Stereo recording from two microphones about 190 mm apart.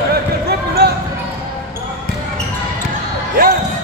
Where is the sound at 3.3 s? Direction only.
50° right (ahead or behind).